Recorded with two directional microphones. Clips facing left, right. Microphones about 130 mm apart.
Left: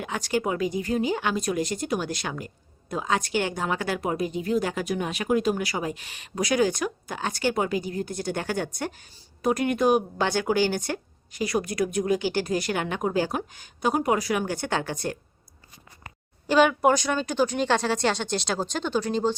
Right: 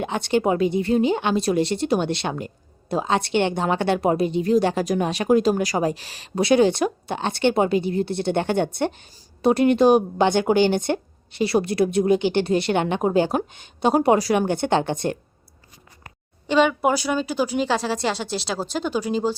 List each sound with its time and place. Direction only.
0.0 s speech: 25° right (ahead or behind)
16.5 s speech: centre (ahead or behind)